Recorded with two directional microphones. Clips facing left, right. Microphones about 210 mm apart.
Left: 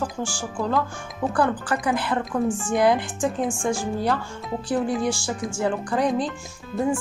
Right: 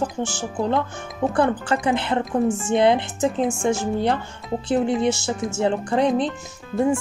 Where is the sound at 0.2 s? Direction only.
20° right (ahead or behind).